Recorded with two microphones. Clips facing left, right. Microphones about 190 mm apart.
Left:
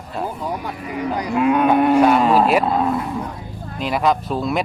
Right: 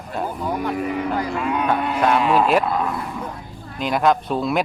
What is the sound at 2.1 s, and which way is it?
Speech, 40° left (ahead or behind).